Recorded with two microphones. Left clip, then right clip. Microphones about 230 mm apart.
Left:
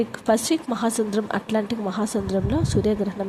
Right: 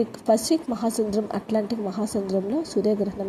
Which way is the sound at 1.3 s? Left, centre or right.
Centre.